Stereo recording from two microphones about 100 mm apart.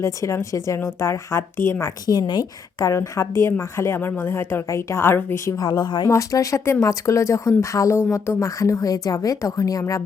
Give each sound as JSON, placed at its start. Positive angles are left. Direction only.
{"t": 0.0, "sound": "a woman's voice", "side_deg": 30}
{"t": 2.0, "sound": "a woman's voice", "side_deg": 45}
{"t": 5.5, "sound": "speech", "side_deg": 45}
{"t": 6.1, "sound": "speech", "side_deg": 30}